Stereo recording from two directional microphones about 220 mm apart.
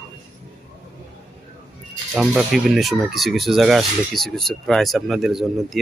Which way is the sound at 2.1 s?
Centre (ahead or behind).